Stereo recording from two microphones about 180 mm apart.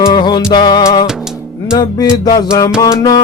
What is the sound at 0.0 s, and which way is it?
Music, 25° left (ahead or behind).